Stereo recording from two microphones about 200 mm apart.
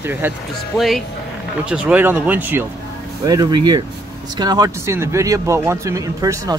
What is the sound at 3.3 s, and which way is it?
Speech, 20° right (ahead or behind).